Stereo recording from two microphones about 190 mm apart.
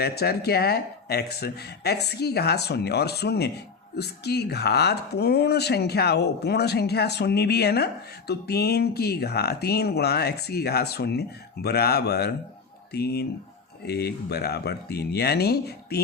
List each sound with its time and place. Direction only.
0.0 s speech: 55° left (ahead or behind)